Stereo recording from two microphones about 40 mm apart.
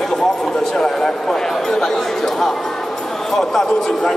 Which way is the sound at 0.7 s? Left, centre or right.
Centre.